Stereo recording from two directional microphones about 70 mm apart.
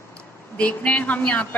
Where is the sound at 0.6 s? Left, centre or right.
Centre.